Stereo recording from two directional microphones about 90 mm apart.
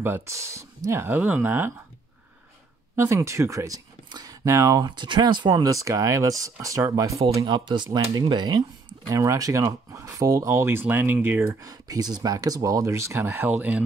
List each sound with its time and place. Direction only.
0.0 s speech: 30° right (ahead or behind)
1.0 s speech: 20° right (ahead or behind)
3.0 s speech: 35° right (ahead or behind); by 5.6 s 55° right (ahead or behind)
5.6 s speech: 40° right (ahead or behind)
7.4 s speech: 55° right (ahead or behind)
9.1 s speech: 35° right (ahead or behind)
11.6 s speech: 45° right (ahead or behind); by 13.8 s 20° right (ahead or behind)